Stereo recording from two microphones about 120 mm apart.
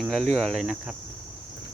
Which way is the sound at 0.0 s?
Centre (ahead or behind).